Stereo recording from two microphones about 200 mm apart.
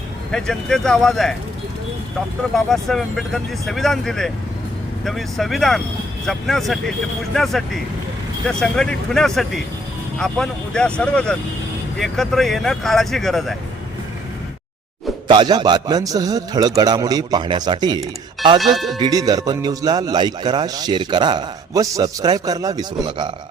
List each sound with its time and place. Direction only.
0.3 s speech: 5° left (ahead or behind)
2.6 s speech: centre (ahead or behind)
15.3 s speech: 20° right (ahead or behind)
18.6 s speech: centre (ahead or behind)
18.9 s speech: 20° right (ahead or behind)